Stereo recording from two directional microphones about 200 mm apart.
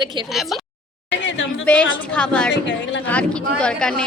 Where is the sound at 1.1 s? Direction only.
65° left (ahead or behind).